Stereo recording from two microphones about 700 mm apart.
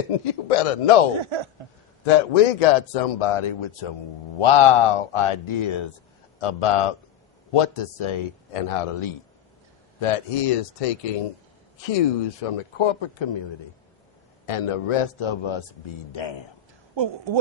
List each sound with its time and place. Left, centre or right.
0.4 s a man's voice: left
1.2 s speech: right
2.0 s a man's voice: left
14.4 s a man's voice: left
16.9 s speech: right